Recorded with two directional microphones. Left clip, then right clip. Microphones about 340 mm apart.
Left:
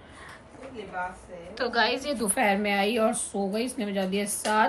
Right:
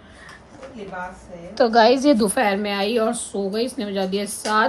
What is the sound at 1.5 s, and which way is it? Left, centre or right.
A woman's voice, centre.